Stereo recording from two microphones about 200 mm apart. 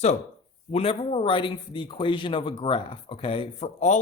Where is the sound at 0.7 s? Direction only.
30° left (ahead or behind).